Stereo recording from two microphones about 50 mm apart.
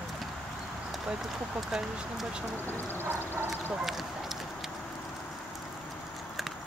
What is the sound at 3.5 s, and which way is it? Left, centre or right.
Speech, centre.